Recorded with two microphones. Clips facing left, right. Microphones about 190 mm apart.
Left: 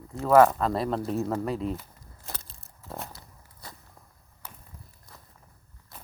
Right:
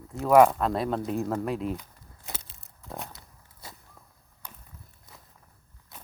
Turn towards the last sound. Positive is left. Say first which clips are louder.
# even
turn(degrees=0)  # may be behind; listen again after turning